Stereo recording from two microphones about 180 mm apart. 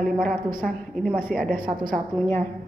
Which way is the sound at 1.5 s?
50° right (ahead or behind).